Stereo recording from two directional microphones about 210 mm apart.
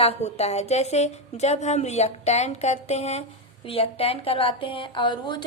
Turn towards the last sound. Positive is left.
turn(degrees=20)  # may be behind; listen again after turning